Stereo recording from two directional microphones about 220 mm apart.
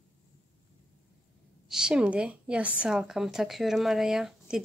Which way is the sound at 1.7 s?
5° right (ahead or behind).